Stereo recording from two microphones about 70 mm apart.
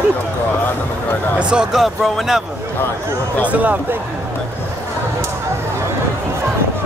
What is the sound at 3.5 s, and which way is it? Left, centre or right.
Speech, right.